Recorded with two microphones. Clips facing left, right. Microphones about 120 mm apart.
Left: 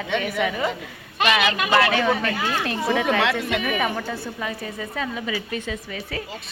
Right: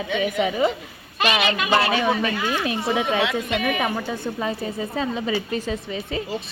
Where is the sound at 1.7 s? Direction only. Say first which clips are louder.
Left 1 dB; 20° right (ahead or behind).